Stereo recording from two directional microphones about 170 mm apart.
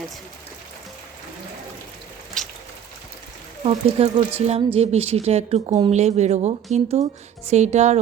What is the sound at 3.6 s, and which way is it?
A woman's voice, 35° right (ahead or behind).